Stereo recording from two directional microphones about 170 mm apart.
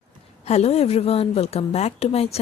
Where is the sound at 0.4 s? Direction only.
40° left (ahead or behind).